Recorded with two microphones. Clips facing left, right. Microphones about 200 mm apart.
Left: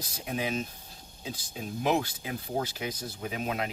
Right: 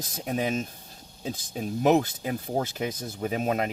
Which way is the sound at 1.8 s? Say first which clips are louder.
Right 6 dB; 45° right (ahead or behind).